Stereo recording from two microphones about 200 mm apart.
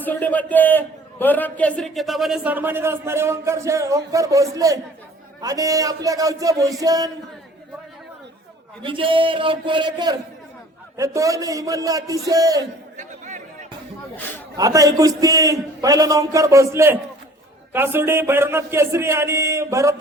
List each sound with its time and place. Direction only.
0.0 s a man's voice: 10° left (ahead or behind); by 7.1 s 20° right (ahead or behind)
8.8 s a man's voice: 25° right (ahead or behind)
13.0 s chatter: 35° right (ahead or behind)
14.5 s a man's voice: 15° right (ahead or behind)